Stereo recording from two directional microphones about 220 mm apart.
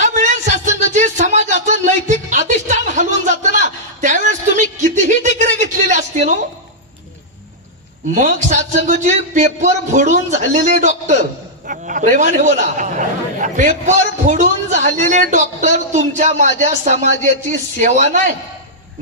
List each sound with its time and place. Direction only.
0.0 s music: 35° right (ahead or behind)
1.6 s a sound: 35° right (ahead or behind)
8.1 s a man's voice: 35° right (ahead or behind)